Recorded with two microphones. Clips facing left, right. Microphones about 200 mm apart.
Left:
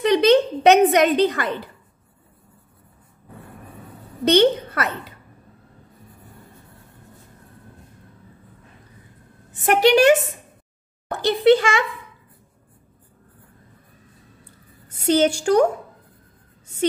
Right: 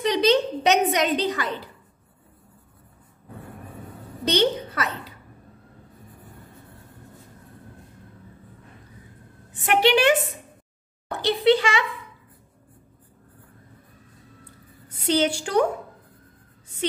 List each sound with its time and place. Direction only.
0.0 s a sound: 55° left (ahead or behind)
4.2 s a woman's voice: 55° left (ahead or behind)
9.5 s speech: 40° left (ahead or behind)
15.0 s speech: 45° left (ahead or behind)